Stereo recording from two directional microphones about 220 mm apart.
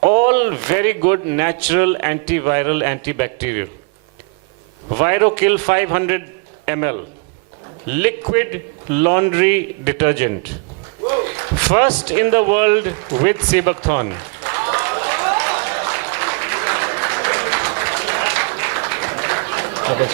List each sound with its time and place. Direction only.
0.2 s speech: 15° right (ahead or behind)
4.9 s speech: 15° right (ahead or behind)
11.6 s a sound: 10° right (ahead or behind)